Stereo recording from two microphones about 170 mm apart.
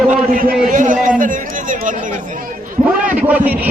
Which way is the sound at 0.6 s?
50° right (ahead or behind).